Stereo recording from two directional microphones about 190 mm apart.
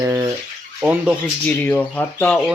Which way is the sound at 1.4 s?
10° left (ahead or behind).